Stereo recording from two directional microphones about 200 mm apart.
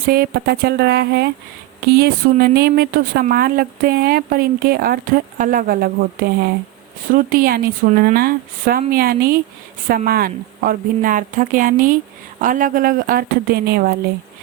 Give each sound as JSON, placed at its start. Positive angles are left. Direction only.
{"t": 0.0, "sound": "speech", "side_deg": -50}